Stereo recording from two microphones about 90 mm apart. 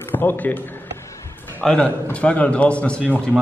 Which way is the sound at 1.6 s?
15° left (ahead or behind).